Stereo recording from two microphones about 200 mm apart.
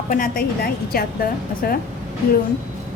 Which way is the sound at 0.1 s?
45° left (ahead or behind).